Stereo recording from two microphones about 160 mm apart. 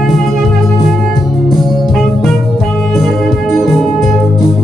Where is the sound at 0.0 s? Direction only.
Centre (ahead or behind).